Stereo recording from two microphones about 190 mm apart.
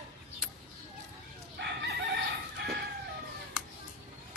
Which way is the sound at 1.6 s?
65° right (ahead or behind).